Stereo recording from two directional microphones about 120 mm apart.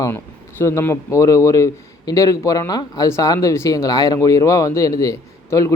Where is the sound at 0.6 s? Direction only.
25° left (ahead or behind).